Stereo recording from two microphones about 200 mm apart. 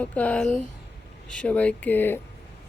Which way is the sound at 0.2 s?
5° left (ahead or behind).